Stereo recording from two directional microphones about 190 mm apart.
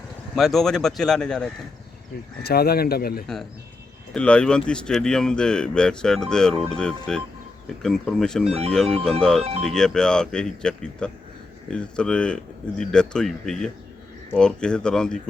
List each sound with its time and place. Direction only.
0.3 s speech: centre (ahead or behind)
2.4 s speech: 55° left (ahead or behind)
4.1 s speech: 5° left (ahead or behind)
9.4 s speech: 30° right (ahead or behind)
9.6 s speech: 5° left (ahead or behind)